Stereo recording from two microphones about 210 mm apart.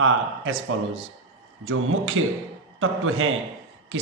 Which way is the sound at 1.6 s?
70° right (ahead or behind).